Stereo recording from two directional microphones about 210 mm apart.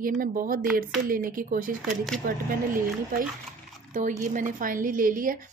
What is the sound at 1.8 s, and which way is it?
Speech, centre (ahead or behind).